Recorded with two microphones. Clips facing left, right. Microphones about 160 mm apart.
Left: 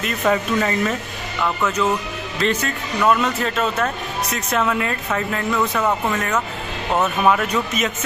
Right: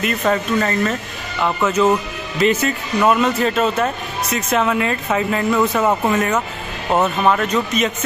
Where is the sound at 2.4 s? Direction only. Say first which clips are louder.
Right 5 dB; 5° right (ahead or behind).